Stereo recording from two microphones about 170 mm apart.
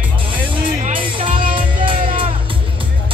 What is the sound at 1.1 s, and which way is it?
Music, 30° right (ahead or behind).